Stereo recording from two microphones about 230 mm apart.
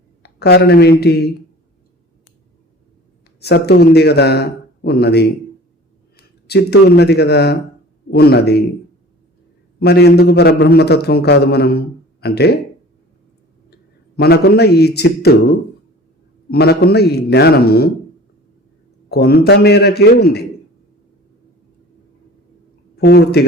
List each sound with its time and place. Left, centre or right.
0.2 s speech: left
3.4 s a man's voice: left
9.8 s a man's voice: left
14.2 s a man's voice: left
19.0 s a man's voice: left
23.0 s speech: left